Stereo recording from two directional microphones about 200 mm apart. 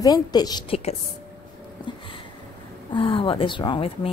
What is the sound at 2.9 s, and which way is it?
A woman's voice, 25° left (ahead or behind).